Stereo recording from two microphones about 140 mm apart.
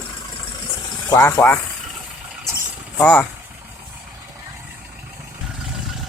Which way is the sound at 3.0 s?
10° left (ahead or behind).